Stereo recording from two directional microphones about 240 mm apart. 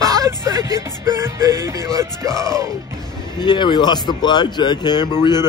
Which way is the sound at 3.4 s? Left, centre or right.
Centre.